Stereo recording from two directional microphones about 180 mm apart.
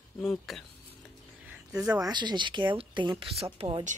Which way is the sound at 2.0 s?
25° right (ahead or behind).